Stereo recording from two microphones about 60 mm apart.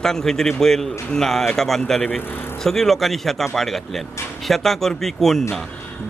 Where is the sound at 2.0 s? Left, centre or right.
Left.